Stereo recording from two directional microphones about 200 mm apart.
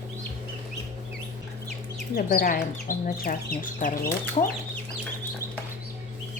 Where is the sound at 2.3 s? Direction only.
40° left (ahead or behind).